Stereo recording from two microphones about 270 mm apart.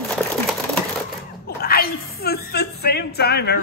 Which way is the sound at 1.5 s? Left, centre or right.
Left.